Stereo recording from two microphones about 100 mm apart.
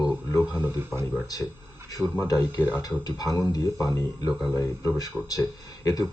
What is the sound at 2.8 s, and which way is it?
Speech, 40° left (ahead or behind).